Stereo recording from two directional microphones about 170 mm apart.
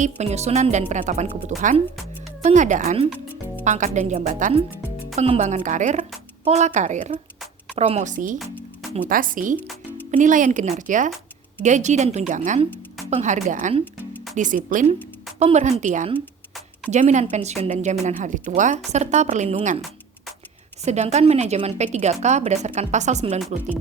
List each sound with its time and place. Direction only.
0.0 s a woman's voice: 40° right (ahead or behind)
20.8 s a woman's voice: 40° right (ahead or behind)